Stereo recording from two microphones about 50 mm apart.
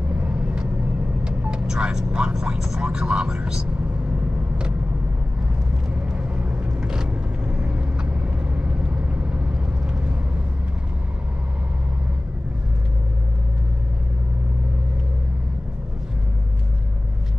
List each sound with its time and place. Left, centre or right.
0.1 s vehicle: right
1.2 s speech: centre
6.1 s vehicle: right